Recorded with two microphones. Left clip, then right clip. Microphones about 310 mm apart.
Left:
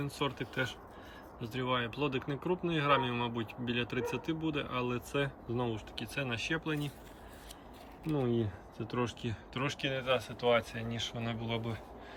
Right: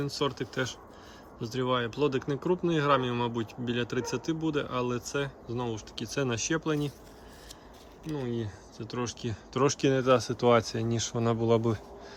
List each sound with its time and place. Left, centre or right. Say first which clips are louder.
0.0 s speech: right 5 dB; centre
8.0 s speech: left 1 dB; centre